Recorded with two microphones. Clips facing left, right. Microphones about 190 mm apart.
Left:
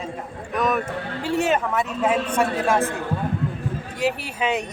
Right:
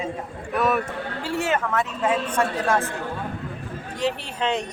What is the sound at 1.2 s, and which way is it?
Speech, 15° left (ahead or behind).